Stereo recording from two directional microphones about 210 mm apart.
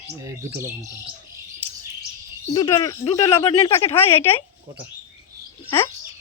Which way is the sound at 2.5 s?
15° left (ahead or behind).